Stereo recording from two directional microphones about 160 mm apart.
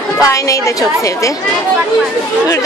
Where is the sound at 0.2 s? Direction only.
20° left (ahead or behind).